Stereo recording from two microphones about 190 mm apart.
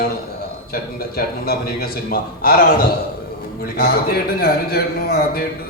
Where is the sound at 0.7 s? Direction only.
50° left (ahead or behind).